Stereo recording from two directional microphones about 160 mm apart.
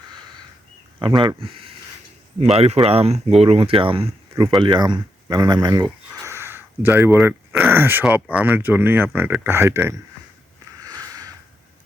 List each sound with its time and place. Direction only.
0.9 s speech: 30° right (ahead or behind)
6.1 s speech: 15° right (ahead or behind)
10.8 s a sound: 20° right (ahead or behind)